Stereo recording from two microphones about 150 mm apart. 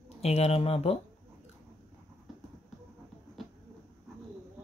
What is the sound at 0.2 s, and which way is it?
Speech, 45° left (ahead or behind).